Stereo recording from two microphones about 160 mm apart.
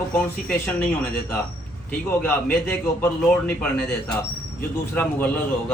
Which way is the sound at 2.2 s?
15° left (ahead or behind).